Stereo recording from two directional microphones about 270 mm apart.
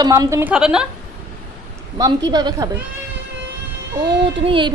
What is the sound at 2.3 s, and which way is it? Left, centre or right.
Speech, centre.